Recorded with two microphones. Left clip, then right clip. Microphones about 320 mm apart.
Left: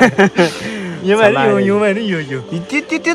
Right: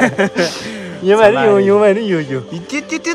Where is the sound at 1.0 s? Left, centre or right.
Right.